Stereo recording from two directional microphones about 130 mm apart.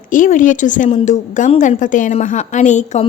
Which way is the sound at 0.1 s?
90° left.